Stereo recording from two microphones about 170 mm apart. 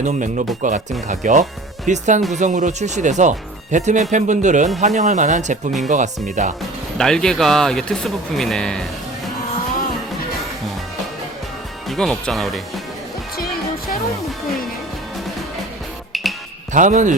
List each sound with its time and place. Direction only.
0.0 s speech: 45° right (ahead or behind)
7.0 s speech: 5° left (ahead or behind)
11.9 s speech: centre (ahead or behind)
13.3 s music: 60° left (ahead or behind)
16.1 s music: centre (ahead or behind)
16.7 s speech: 45° right (ahead or behind)